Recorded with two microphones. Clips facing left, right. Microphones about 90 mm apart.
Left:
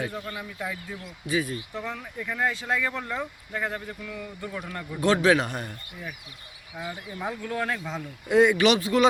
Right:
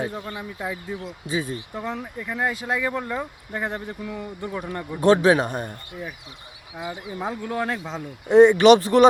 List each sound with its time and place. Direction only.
0.0 s speech: 25° right (ahead or behind)
2.1 s speech: 10° right (ahead or behind); by 5.5 s 35° right (ahead or behind)
6.7 s speech: 20° right (ahead or behind)
8.6 s speech: 50° right (ahead or behind)